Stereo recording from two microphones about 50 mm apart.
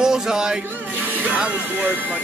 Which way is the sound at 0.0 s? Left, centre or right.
Centre.